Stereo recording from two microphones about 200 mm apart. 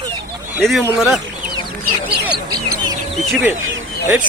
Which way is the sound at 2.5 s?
20° right (ahead or behind).